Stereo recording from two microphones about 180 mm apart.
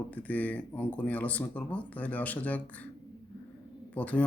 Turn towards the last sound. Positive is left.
turn(degrees=10)  # may be behind; listen again after turning